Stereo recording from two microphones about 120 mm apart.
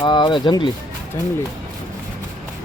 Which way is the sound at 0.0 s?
40° left (ahead or behind).